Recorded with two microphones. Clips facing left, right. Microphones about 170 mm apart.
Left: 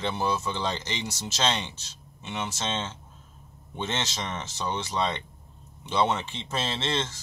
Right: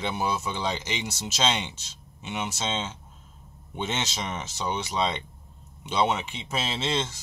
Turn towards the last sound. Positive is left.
turn(degrees=-15)  # may be behind; listen again after turning